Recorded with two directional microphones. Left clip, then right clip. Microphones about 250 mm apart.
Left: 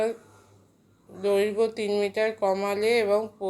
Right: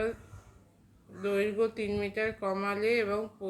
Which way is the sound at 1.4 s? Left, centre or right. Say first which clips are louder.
Left 2 dB; centre.